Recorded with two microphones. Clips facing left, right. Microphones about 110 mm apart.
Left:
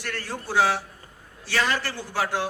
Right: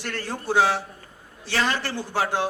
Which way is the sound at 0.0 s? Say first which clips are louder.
Right 2 dB; 20° right (ahead or behind).